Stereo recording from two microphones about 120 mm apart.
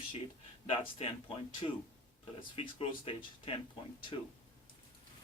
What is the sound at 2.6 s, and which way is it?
Speech, 50° left (ahead or behind).